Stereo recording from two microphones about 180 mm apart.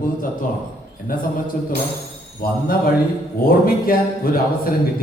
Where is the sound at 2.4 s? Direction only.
55° left (ahead or behind).